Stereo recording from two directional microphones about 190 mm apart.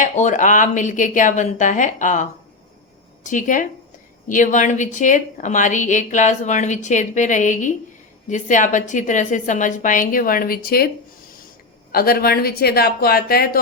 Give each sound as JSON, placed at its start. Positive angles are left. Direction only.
{"t": 0.0, "sound": "a woman's voice", "side_deg": 40}
{"t": 3.2, "sound": "a woman's voice", "side_deg": 45}
{"t": 11.9, "sound": "a woman's voice", "side_deg": 55}